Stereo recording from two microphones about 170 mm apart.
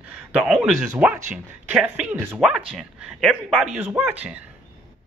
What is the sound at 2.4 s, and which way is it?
A man's voice, 5° right (ahead or behind).